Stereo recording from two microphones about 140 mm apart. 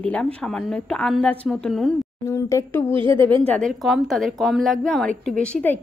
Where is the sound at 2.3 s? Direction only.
20° left (ahead or behind).